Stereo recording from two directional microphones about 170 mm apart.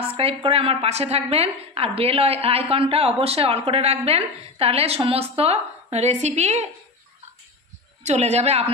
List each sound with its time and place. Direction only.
0.1 s a woman's voice: 35° right (ahead or behind)
8.0 s a woman's voice: 40° right (ahead or behind)